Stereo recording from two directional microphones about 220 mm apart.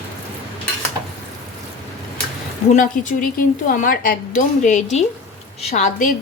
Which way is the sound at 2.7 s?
35° left (ahead or behind).